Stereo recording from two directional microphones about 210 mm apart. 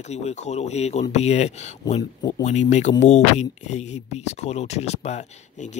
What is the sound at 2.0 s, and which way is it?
Speech, 20° left (ahead or behind).